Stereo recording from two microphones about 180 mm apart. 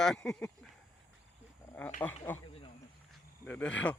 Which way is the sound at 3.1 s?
5° left (ahead or behind).